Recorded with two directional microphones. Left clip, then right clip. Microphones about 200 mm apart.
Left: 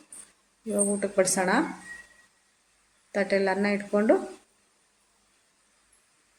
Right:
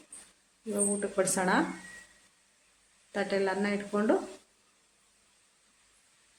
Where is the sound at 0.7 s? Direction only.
15° left (ahead or behind).